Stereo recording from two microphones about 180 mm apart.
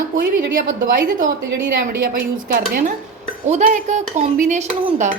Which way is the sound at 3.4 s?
40° right (ahead or behind).